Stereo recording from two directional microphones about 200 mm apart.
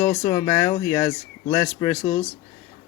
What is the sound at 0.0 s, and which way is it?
Speech, 20° left (ahead or behind).